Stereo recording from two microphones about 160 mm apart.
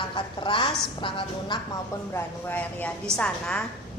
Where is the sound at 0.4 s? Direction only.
30° left (ahead or behind).